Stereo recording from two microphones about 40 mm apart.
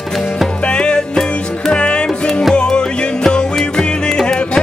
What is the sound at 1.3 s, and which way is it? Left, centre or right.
Music, left.